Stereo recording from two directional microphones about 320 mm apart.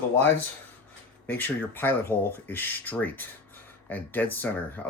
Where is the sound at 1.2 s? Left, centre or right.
Centre.